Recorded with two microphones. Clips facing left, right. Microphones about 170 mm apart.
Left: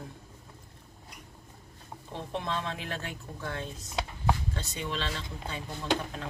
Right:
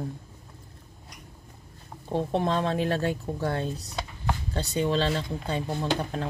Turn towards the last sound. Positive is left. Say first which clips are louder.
# right 3 dB
turn(degrees=-35)  # may be behind; listen again after turning